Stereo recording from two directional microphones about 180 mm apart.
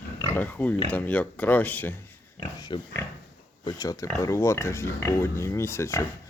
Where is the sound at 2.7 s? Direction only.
25° left (ahead or behind).